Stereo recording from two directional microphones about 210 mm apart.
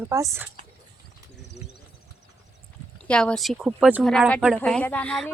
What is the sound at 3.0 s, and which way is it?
A woman's voice, 5° left (ahead or behind).